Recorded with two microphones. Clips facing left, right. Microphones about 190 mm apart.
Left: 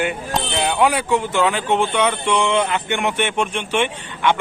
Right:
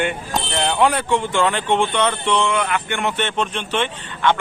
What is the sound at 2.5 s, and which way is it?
A man's voice, 20° left (ahead or behind).